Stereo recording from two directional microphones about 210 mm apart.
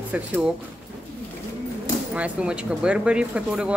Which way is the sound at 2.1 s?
5° right (ahead or behind).